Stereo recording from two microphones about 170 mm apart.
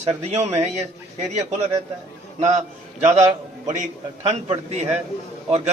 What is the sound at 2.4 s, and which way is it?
Speech, 40° right (ahead or behind).